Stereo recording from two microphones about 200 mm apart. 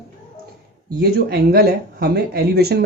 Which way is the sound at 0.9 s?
50° right (ahead or behind).